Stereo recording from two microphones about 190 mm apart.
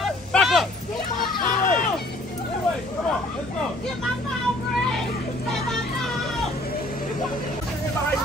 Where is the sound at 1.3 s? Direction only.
45° left (ahead or behind).